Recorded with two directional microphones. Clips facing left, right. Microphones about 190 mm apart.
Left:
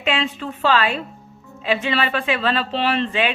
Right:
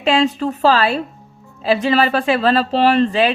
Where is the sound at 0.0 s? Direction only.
40° right (ahead or behind).